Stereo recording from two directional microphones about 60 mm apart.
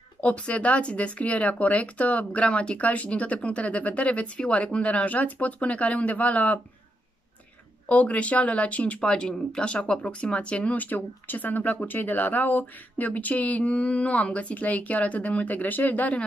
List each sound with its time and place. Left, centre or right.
0.2 s speech: left
7.9 s speech: left